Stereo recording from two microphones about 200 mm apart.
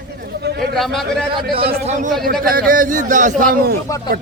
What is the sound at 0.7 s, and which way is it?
Speech, centre (ahead or behind).